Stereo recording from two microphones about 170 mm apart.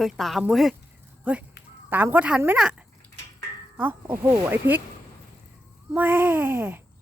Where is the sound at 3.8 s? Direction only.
10° right (ahead or behind).